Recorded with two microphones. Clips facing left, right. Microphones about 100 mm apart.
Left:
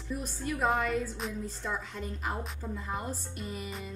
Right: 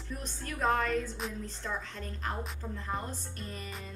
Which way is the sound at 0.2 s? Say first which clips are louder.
Left 1 dB; 10° left (ahead or behind).